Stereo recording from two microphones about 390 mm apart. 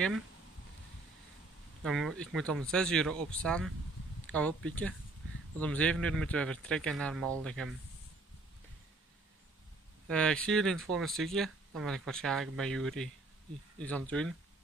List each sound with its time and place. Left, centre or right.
1.8 s speech: centre
10.0 s speech: centre